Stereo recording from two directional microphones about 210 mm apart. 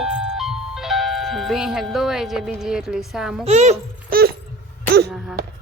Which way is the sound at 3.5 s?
30° right (ahead or behind).